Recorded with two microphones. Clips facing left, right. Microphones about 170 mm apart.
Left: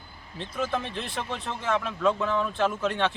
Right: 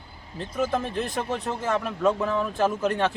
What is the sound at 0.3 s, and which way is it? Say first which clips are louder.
Speech: right 3 dB; 5° right (ahead or behind).